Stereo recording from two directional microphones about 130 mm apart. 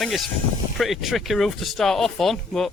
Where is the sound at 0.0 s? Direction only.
Centre (ahead or behind).